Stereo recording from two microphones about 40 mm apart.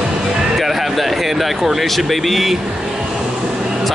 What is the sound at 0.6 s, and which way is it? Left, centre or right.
Speech, centre.